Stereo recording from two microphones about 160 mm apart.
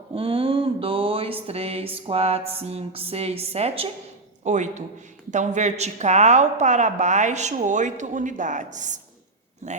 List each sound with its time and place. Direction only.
0.1 s mantra: 35° right (ahead or behind)
2.0 s a woman's voice: 40° right (ahead or behind)